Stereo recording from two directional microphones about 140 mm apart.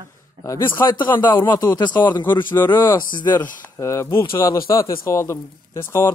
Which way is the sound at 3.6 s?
20° left (ahead or behind).